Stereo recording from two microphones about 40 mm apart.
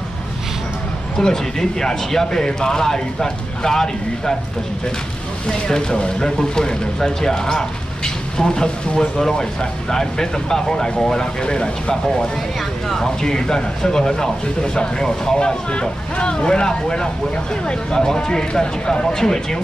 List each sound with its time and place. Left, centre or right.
1.1 s speech: centre
5.5 s speech: centre